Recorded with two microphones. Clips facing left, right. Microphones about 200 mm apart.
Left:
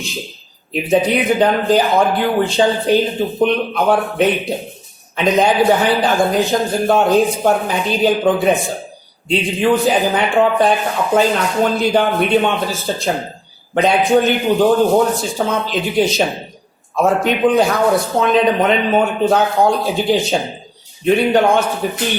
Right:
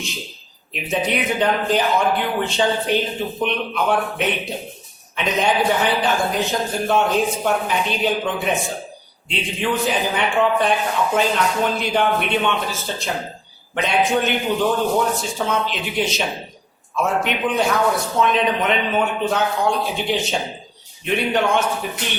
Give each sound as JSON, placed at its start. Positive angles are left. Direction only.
{"t": 0.7, "sound": "speech", "side_deg": 35}